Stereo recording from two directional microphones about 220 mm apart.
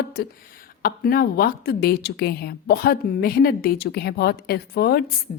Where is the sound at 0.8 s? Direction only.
40° left (ahead or behind).